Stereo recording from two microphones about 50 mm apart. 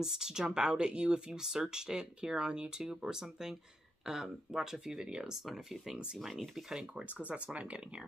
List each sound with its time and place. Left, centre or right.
0.0 s speech: centre
7.2 s speech: right